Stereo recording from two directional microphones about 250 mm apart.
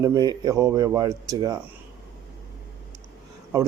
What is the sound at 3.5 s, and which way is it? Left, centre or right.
Speech, centre.